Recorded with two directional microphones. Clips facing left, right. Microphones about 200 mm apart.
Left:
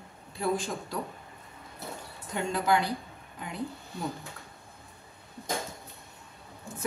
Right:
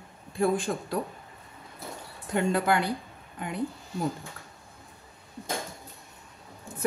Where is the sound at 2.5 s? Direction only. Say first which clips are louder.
Left 1 dB; 55° right (ahead or behind).